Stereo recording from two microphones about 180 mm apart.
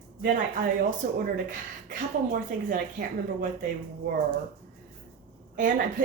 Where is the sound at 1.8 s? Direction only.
45° right (ahead or behind).